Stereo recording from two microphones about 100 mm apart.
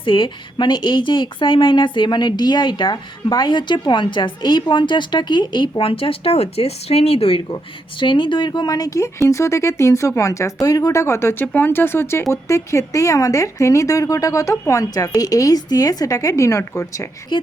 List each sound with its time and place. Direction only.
0.0 s speech: 55° left (ahead or behind); by 7.4 s 75° left (ahead or behind)
7.5 s speech: 55° left (ahead or behind); by 17.1 s 30° left (ahead or behind)
17.3 s speech: 55° left (ahead or behind)